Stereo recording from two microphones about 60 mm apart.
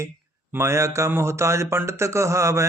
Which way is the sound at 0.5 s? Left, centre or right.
Right.